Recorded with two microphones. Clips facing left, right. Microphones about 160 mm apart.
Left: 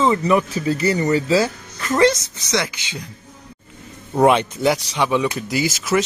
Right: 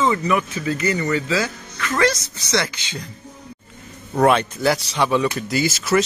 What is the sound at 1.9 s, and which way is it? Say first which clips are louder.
Speech: left 4 dB; 20° left (ahead or behind).